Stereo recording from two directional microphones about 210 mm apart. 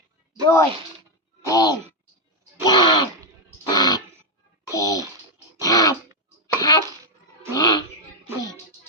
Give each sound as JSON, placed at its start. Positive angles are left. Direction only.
{"t": 0.4, "sound": "speech", "side_deg": 15}
{"t": 2.6, "sound": "a sound", "side_deg": 20}
{"t": 6.6, "sound": "cough", "side_deg": 20}
{"t": 7.5, "sound": "music", "side_deg": 15}